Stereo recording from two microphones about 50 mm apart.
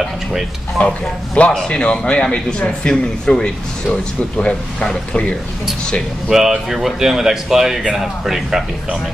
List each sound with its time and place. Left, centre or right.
0.0 s speech: centre
0.7 s a man's voice: left
6.3 s speech: centre